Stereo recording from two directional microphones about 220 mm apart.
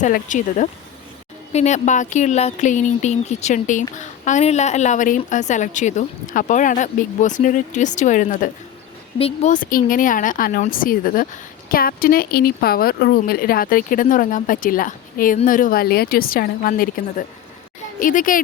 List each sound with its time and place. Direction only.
0.0 s speech: 35° left (ahead or behind)